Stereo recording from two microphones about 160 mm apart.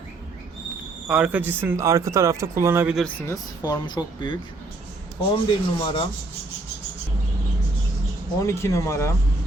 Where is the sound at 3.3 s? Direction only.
20° left (ahead or behind).